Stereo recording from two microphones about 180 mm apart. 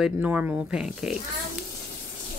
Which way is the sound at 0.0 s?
5° right (ahead or behind).